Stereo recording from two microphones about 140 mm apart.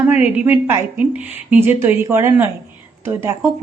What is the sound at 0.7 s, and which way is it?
A woman's voice, 15° right (ahead or behind).